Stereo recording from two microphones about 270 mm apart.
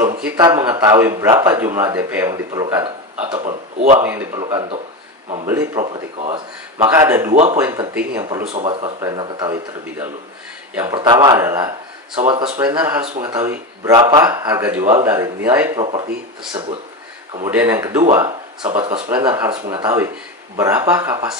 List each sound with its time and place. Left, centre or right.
0.2 s speech: centre
3.4 s a man's voice: right
4.0 s speech: centre
8.5 s speech: right
17.5 s speech: centre